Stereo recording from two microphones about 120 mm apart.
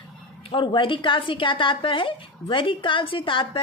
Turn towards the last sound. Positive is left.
turn(degrees=45)  # may be behind; listen again after turning